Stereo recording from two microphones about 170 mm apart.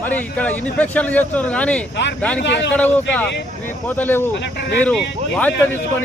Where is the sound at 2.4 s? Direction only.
90° left.